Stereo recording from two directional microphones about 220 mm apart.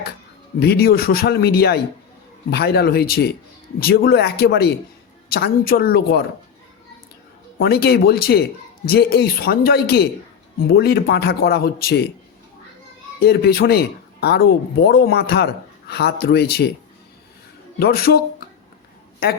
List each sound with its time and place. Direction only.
0.6 s a man's voice: 45° left (ahead or behind)
7.6 s a man's voice: 45° left (ahead or behind)
13.1 s a man's voice: 45° left (ahead or behind)
17.7 s a man's voice: 45° left (ahead or behind)